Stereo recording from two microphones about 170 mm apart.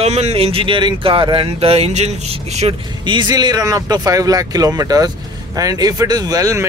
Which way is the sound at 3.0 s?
25° right (ahead or behind).